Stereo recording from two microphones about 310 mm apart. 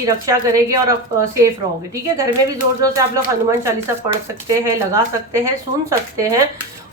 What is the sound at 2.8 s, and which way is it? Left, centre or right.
Speech, centre.